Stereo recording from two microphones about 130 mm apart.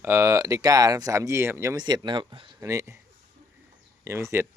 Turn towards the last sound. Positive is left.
turn(degrees=-20)  # may be behind; listen again after turning